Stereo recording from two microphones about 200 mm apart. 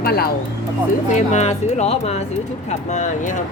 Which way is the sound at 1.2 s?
35° left (ahead or behind).